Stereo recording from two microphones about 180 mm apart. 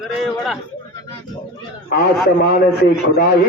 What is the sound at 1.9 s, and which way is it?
A man's voice, 60° left (ahead or behind).